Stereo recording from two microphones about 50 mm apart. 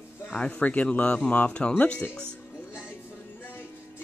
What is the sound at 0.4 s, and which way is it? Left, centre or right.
Speech, left.